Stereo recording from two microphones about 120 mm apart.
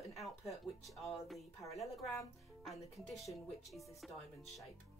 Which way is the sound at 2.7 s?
60° left (ahead or behind).